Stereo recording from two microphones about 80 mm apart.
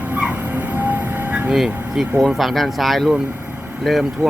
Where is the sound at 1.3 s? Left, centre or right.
Centre.